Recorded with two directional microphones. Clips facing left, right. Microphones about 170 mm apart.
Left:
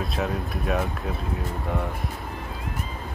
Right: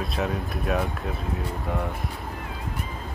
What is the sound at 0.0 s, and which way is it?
Speech, centre (ahead or behind).